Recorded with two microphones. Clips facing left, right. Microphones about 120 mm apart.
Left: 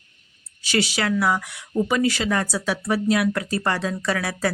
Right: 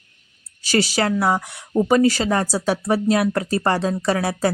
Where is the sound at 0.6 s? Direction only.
40° right (ahead or behind).